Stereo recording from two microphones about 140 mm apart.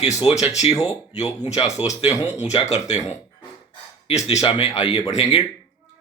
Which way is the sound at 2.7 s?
50° left (ahead or behind).